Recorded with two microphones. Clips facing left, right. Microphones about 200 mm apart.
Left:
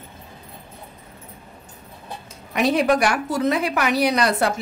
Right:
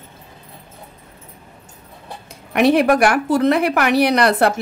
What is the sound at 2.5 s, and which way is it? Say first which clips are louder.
A woman's voice: right 5 dB; 60° right (ahead or behind).